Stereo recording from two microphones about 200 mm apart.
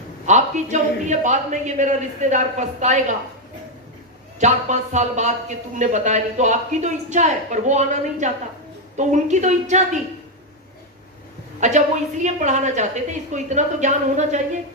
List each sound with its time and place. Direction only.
0.3 s a man's voice: 35° right (ahead or behind)
4.4 s a man's voice: 35° right (ahead or behind)
11.6 s a man's voice: 35° right (ahead or behind)